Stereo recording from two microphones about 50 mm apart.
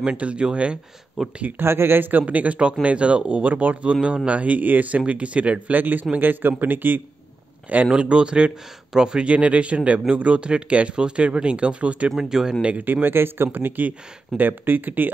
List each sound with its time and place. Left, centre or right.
0.0 s speech: right
1.2 s speech: centre
1.6 s speech: right
7.9 s speech: right
12.2 s speech: centre
12.6 s speech: right